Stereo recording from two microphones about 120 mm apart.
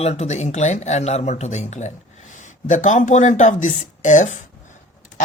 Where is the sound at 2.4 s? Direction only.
90° left.